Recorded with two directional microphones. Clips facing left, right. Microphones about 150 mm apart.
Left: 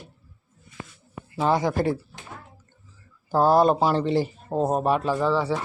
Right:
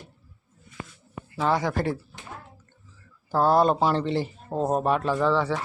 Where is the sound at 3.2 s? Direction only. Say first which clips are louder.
Left 2 dB; 15° left (ahead or behind).